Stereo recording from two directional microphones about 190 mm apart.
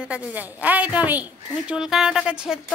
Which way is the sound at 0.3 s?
10° right (ahead or behind).